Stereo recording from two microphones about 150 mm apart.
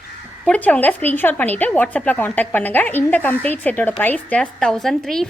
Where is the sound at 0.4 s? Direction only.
10° left (ahead or behind).